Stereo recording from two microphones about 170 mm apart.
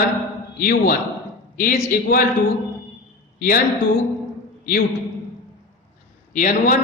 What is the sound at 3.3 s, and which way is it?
Speech, 55° left (ahead or behind).